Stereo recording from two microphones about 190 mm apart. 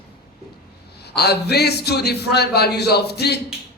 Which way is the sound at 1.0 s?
60° left (ahead or behind).